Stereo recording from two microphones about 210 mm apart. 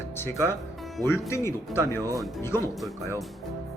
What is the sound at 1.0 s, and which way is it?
Speech, 15° left (ahead or behind).